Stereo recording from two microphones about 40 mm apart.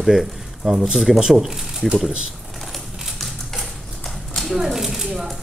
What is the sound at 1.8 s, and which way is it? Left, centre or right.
Speech, centre.